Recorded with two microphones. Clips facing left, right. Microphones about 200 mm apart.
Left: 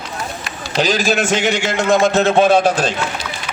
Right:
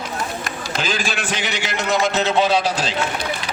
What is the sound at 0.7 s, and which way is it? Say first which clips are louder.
A man's voice: left 9 dB; 40° left (ahead or behind).